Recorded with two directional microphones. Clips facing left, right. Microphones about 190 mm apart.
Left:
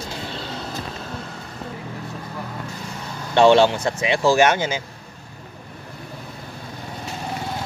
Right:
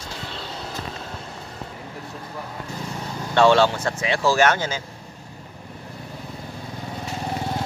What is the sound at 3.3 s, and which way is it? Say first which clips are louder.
Speech: left 3 dB; 20° left (ahead or behind).